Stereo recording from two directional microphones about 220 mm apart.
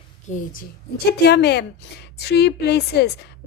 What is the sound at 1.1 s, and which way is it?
Speech, 50° left (ahead or behind).